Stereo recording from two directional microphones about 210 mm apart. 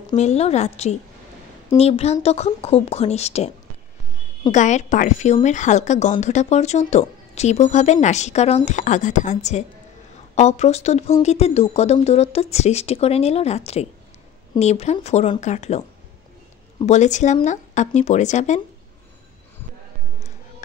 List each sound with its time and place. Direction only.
0.1 s a woman's voice: 30° left (ahead or behind)
16.8 s speech: 35° left (ahead or behind)